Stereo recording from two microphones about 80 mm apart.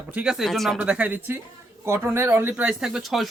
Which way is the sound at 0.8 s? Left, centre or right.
Centre.